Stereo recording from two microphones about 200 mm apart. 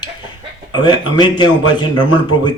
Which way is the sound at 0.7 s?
20° left (ahead or behind).